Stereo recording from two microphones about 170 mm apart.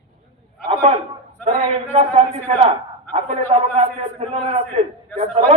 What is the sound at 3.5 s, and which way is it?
A man's voice, 35° right (ahead or behind).